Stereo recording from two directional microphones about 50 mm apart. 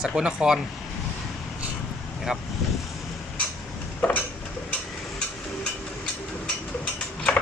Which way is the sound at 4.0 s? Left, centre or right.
Left.